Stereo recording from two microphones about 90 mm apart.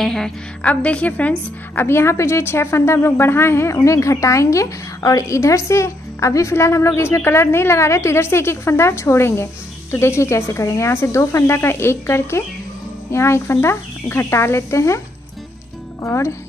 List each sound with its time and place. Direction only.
0.0 s a woman's voice: 5° left (ahead or behind)
0.7 s a woman's voice: 15° left (ahead or behind)
1.9 s a woman's voice: 30° left (ahead or behind)
16.0 s a woman's voice: 30° left (ahead or behind)